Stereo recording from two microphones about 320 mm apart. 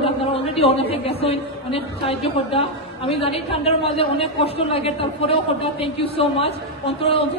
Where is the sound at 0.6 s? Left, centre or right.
Centre.